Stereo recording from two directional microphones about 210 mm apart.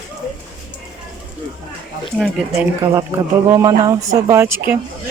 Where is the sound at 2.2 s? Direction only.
Centre (ahead or behind).